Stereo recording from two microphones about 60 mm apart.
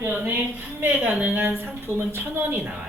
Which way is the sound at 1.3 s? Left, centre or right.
Right.